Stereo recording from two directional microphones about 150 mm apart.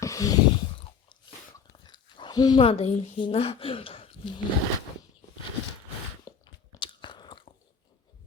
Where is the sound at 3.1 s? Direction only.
35° left (ahead or behind).